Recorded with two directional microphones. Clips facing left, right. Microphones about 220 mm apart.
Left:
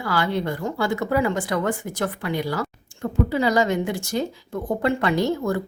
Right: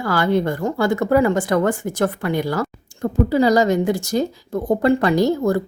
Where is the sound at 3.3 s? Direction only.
40° right (ahead or behind).